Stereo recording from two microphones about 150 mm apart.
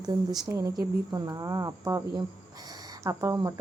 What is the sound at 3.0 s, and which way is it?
Speech, 20° right (ahead or behind).